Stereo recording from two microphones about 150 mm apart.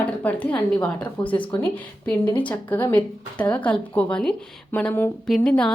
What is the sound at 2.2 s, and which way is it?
Speech, 30° left (ahead or behind).